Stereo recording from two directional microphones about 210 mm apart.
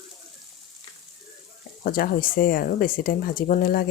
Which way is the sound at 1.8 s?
45° left (ahead or behind).